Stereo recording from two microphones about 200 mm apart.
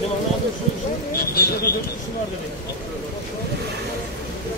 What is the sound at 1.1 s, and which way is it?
Speech, 50° left (ahead or behind).